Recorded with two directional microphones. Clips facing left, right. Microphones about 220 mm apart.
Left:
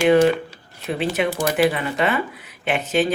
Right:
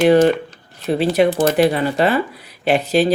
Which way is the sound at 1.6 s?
35° right (ahead or behind).